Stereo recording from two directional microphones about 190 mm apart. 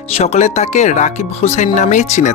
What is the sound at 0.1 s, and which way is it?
Speech, 35° left (ahead or behind).